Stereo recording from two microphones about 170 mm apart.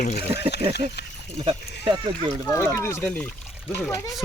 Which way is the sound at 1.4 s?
30° right (ahead or behind).